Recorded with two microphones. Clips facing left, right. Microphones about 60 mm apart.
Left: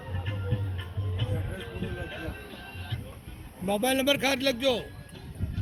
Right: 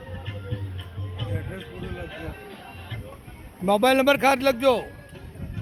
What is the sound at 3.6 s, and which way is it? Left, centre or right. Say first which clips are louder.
A man's voice: right 7 dB; right.